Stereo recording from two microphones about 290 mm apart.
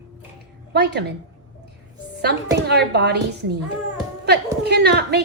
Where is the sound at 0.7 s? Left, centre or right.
Right.